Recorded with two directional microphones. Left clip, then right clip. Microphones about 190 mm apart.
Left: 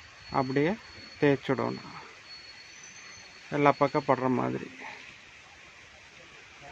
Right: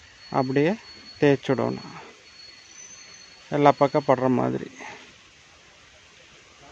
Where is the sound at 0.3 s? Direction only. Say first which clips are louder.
Right 5 dB; 35° right (ahead or behind).